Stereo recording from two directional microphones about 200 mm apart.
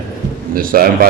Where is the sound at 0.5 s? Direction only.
45° right (ahead or behind).